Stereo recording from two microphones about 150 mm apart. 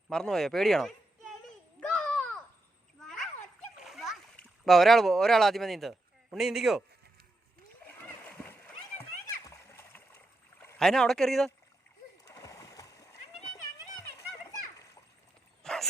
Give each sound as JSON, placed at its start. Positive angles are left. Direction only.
{"t": 0.1, "sound": "speech", "side_deg": 5}
{"t": 1.8, "sound": "a sound", "side_deg": 5}
{"t": 3.8, "sound": "splash", "side_deg": 0}
{"t": 8.0, "sound": "splash", "side_deg": 10}
{"t": 10.8, "sound": "speech", "side_deg": 5}
{"t": 12.2, "sound": "splash", "side_deg": 20}
{"t": 15.6, "sound": "a sound", "side_deg": 5}